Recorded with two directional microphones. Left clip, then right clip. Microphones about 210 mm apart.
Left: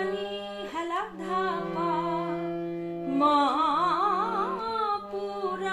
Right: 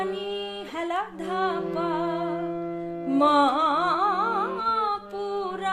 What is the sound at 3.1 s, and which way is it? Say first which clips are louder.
Carnatic music: right 3 dB; 55° right (ahead or behind).